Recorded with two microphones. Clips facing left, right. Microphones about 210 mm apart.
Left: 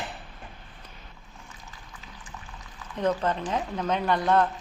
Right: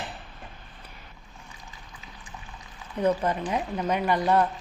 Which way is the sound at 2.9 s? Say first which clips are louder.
Right 1 dB; 10° right (ahead or behind).